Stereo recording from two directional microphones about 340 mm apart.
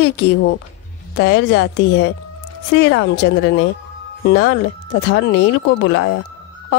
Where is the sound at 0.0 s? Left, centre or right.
Left.